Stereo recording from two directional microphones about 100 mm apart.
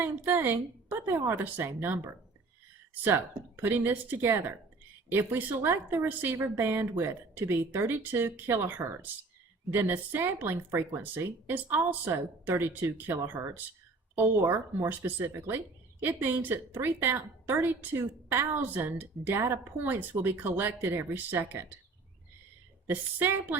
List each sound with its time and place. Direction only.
0.0 s speech: 20° right (ahead or behind)
22.9 s speech: 20° right (ahead or behind)